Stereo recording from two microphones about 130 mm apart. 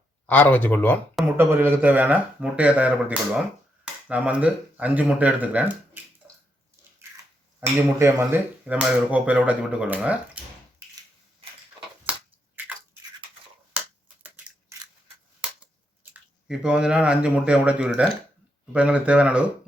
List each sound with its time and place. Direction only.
0.3 s speech: 10° left (ahead or behind)
1.4 s speech: 15° right (ahead or behind)
6.2 s bathtub: 10° right (ahead or behind)
7.8 s speech: 20° right (ahead or behind)
8.6 s speech: 10° right (ahead or behind)
12.1 s a sound: 10° right (ahead or behind)
13.7 s crushing: 15° right (ahead or behind)
16.1 s speech: 5° right (ahead or behind)